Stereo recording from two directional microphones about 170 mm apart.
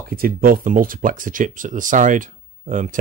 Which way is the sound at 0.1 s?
60° right (ahead or behind).